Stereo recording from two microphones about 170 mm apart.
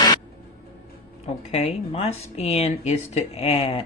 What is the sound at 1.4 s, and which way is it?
Speech, 35° left (ahead or behind).